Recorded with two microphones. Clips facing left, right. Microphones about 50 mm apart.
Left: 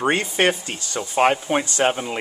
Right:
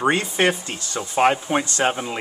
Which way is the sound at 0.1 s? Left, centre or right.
Left.